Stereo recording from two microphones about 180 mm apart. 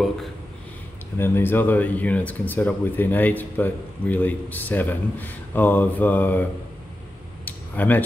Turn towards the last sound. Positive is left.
turn(degrees=10)  # may be behind; listen again after turning